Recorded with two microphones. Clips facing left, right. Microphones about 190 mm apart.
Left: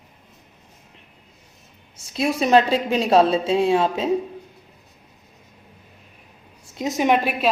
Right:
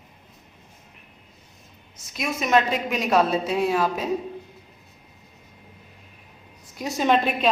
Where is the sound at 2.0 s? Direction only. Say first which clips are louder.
Left 6 dB; 30° left (ahead or behind).